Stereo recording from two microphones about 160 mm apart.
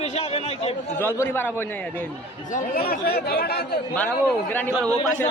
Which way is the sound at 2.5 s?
65° left (ahead or behind).